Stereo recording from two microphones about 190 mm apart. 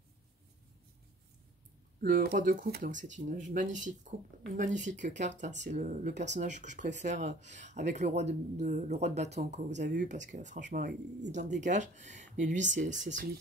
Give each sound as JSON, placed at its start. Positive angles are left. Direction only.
{"t": 2.0, "sound": "speech", "side_deg": -50}
{"t": 9.7, "sound": "speech", "side_deg": -70}
{"t": 9.9, "sound": "speech", "side_deg": -40}